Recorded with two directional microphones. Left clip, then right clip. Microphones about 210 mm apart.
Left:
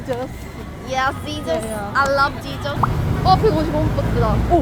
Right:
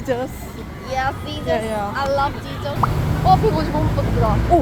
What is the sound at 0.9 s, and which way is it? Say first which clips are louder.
Speech: left 2 dB; 35° left (ahead or behind).